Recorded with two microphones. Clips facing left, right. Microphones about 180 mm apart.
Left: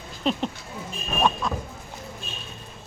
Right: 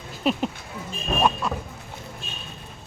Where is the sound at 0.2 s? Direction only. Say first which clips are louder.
Right 2 dB; 5° right (ahead or behind).